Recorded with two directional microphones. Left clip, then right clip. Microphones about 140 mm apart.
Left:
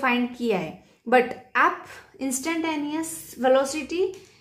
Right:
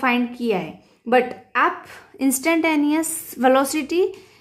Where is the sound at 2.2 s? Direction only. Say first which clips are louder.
Right 8 dB; 45° right (ahead or behind).